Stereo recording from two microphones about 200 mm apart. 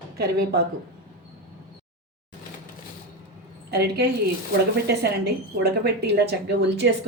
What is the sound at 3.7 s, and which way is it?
Speech, 55° right (ahead or behind).